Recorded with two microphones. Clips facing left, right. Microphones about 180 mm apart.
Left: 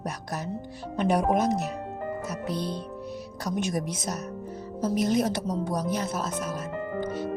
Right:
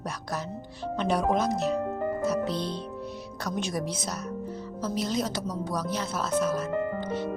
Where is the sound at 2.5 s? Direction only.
45° left (ahead or behind).